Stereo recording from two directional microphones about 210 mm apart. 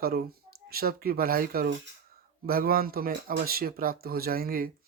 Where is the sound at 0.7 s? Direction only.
45° right (ahead or behind).